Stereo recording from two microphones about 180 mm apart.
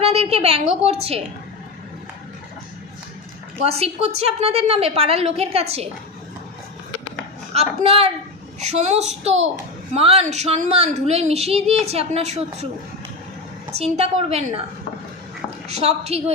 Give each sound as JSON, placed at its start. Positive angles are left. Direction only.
{"t": 0.0, "sound": "a woman's voice", "side_deg": -35}
{"t": 3.6, "sound": "a woman's voice", "side_deg": -35}
{"t": 7.5, "sound": "a woman's voice", "side_deg": -35}
{"t": 13.7, "sound": "a woman's voice", "side_deg": -35}
{"t": 15.7, "sound": "a woman's voice", "side_deg": -35}